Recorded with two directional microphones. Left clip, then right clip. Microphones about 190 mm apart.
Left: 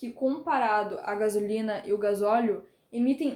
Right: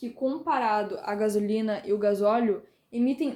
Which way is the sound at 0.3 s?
35° right (ahead or behind).